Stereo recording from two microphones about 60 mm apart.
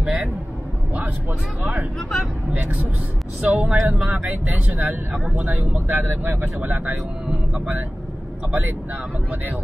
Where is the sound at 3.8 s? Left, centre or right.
Right.